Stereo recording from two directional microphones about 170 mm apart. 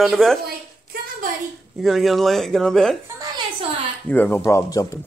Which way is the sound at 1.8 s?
Centre (ahead or behind).